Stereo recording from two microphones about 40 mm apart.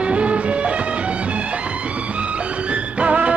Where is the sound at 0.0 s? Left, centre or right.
Right.